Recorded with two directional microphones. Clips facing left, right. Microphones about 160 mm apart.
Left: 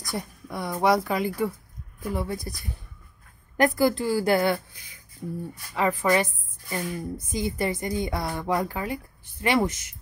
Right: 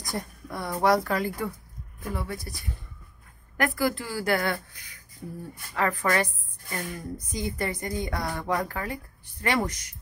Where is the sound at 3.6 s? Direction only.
25° left (ahead or behind).